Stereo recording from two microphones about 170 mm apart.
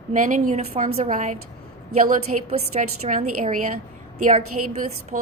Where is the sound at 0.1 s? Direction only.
50° right (ahead or behind).